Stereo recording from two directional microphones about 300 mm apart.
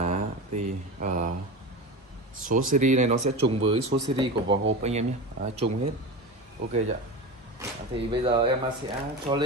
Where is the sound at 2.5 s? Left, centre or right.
Right.